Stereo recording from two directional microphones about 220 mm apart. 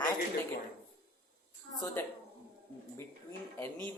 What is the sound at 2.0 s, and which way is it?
Speech, 10° left (ahead or behind).